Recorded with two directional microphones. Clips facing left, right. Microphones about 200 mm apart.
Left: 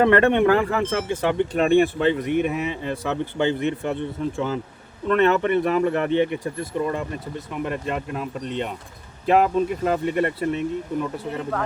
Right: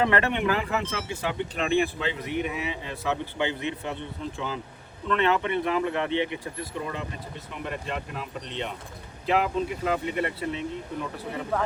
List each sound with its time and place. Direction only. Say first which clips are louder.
0.0 s speech: left 8 dB; 55° left (ahead or behind)